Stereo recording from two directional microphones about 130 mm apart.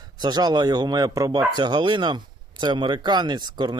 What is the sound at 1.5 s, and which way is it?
Speech, 35° right (ahead or behind).